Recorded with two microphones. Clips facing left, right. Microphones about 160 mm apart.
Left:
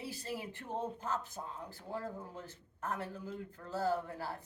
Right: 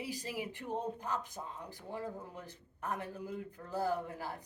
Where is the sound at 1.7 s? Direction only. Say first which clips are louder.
Even; 15° right (ahead or behind).